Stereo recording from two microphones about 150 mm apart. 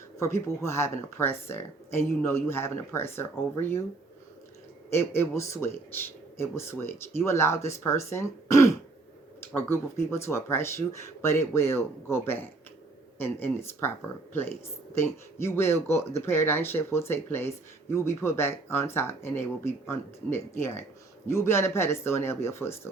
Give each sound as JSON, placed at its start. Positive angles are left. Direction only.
{"t": 0.2, "sound": "speech", "side_deg": 20}
{"t": 4.9, "sound": "speech", "side_deg": 15}